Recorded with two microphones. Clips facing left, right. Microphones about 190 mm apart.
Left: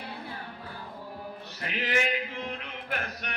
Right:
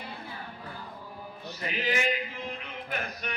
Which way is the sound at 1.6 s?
65° left (ahead or behind).